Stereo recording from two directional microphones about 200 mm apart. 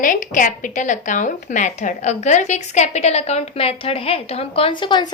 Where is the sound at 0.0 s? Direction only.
40° left (ahead or behind).